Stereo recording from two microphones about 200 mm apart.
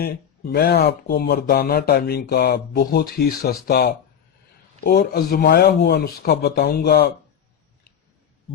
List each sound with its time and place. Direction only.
0.0 s speech: 50° left (ahead or behind)
5.1 s speech: 50° left (ahead or behind)